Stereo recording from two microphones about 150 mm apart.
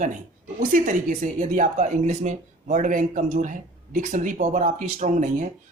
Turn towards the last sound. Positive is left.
turn(degrees=-55)  # may be behind; listen again after turning